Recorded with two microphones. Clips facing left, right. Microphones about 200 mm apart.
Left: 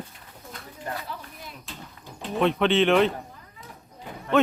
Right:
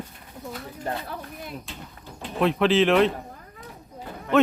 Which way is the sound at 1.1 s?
55° right (ahead or behind).